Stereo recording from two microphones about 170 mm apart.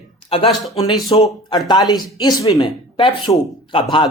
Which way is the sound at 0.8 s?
20° left (ahead or behind).